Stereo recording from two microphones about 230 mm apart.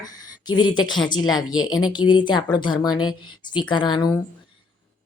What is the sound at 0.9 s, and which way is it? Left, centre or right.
Speech, centre.